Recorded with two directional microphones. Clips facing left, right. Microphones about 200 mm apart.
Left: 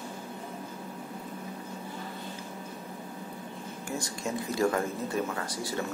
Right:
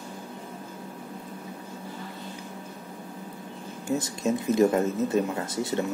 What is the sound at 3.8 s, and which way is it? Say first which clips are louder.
Speech: right 8 dB; 20° right (ahead or behind).